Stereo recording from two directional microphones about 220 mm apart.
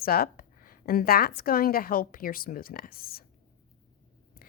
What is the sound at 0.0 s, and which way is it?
A woman's voice, 45° left (ahead or behind).